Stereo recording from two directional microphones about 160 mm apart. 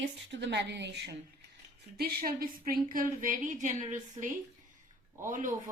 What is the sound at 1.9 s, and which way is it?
A woman's voice, 75° right (ahead or behind).